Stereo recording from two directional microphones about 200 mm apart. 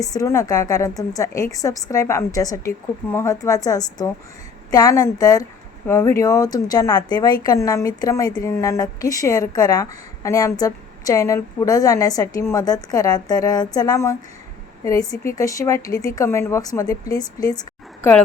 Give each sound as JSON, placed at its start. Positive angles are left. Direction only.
{"t": 0.0, "sound": "a woman's voice", "side_deg": 15}